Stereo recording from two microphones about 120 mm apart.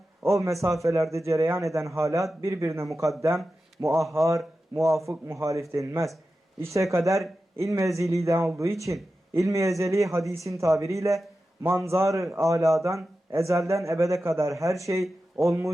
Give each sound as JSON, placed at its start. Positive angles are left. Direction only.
{"t": 0.2, "sound": "a man's voice", "side_deg": -25}